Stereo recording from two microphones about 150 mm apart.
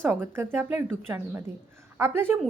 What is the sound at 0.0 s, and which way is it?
A woman's voice, 15° right (ahead or behind).